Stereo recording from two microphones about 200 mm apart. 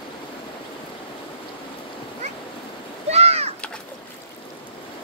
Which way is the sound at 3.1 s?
30° right (ahead or behind).